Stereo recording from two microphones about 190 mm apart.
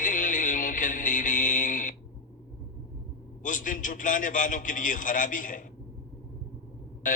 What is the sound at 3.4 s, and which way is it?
Music, 45° left (ahead or behind).